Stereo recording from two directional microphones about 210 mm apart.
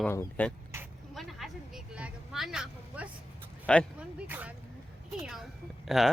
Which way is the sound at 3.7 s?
5° left (ahead or behind).